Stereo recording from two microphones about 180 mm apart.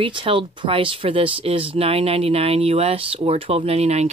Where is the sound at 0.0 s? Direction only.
30° right (ahead or behind).